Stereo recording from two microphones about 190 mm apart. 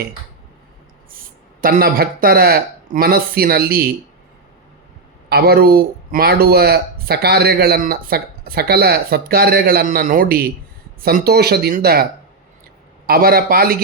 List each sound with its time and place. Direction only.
1.6 s speech: 50° right (ahead or behind)
5.3 s speech: 55° right (ahead or behind)
13.1 s speech: 50° right (ahead or behind)